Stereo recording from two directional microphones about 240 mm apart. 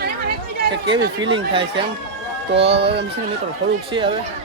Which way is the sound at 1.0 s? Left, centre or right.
Right.